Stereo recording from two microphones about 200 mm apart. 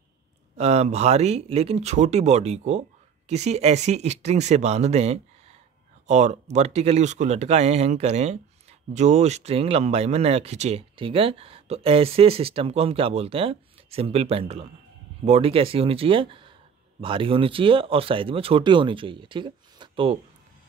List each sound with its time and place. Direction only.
0.6 s speech: 35° right (ahead or behind)